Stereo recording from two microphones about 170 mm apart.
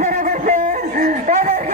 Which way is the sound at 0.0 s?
45° right (ahead or behind).